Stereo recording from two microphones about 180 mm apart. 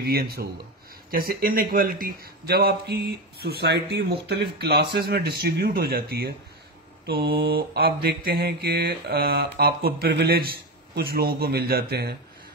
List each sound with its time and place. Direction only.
0.0 s mantra: 60° right (ahead or behind)